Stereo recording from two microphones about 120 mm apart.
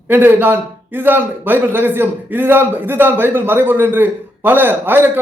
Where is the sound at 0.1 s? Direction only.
15° right (ahead or behind).